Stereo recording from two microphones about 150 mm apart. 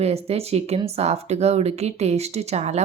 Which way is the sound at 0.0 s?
45° right (ahead or behind).